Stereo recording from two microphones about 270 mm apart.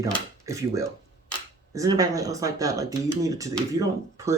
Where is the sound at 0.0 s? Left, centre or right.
Centre.